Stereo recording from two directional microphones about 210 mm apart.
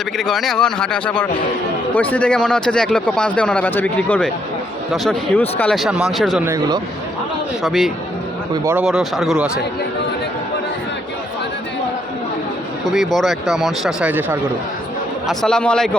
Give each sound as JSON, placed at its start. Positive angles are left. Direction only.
{"t": 0.2, "sound": "speech", "side_deg": 0}
{"t": 6.4, "sound": "speech", "side_deg": -15}
{"t": 7.6, "sound": "speech", "side_deg": 0}
{"t": 12.8, "sound": "speech", "side_deg": 0}
{"t": 15.3, "sound": "speech", "side_deg": 0}